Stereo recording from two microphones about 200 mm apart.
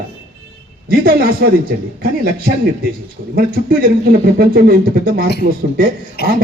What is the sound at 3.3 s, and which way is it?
Speech, 45° right (ahead or behind).